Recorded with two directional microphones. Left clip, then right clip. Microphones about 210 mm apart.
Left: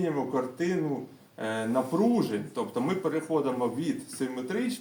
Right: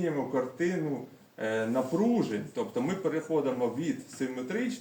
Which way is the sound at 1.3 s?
Centre (ahead or behind).